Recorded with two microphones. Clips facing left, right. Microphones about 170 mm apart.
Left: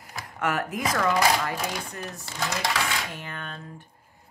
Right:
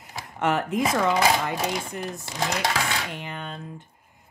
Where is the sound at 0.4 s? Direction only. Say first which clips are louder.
Right 4 dB; 25° right (ahead or behind).